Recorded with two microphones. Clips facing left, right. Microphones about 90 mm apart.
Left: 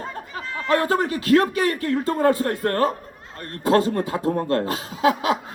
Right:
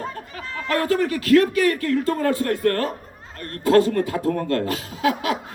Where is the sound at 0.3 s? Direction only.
25° left (ahead or behind).